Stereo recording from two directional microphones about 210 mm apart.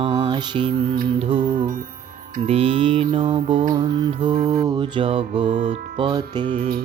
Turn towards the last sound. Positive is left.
turn(degrees=-45)  # may be behind; listen again after turning